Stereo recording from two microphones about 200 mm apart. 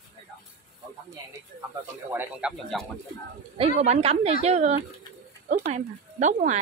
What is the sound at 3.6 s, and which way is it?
Speech, 30° right (ahead or behind).